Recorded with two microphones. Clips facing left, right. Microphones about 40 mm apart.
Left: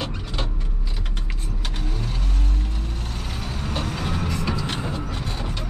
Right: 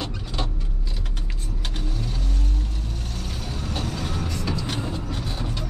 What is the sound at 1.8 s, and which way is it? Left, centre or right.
Vehicle, centre.